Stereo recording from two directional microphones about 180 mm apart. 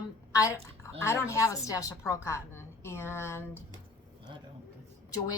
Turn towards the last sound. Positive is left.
turn(degrees=20)  # may be behind; listen again after turning